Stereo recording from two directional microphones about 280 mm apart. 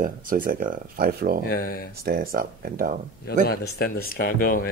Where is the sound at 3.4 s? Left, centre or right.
Left.